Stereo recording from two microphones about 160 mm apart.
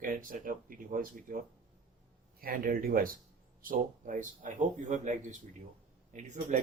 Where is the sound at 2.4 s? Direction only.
65° right (ahead or behind).